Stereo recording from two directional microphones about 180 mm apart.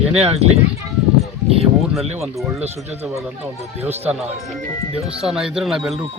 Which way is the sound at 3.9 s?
10° right (ahead or behind).